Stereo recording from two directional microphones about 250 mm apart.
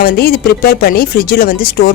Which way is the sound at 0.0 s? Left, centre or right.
Left.